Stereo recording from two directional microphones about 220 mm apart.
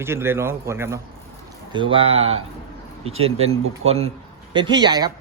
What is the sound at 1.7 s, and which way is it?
A man's voice, 25° right (ahead or behind).